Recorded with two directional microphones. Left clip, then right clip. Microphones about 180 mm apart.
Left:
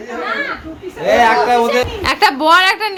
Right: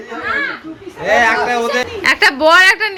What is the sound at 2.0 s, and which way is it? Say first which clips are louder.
Speech: right 4 dB; centre (ahead or behind).